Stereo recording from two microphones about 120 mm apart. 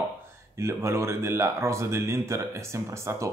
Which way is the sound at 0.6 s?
20° right (ahead or behind).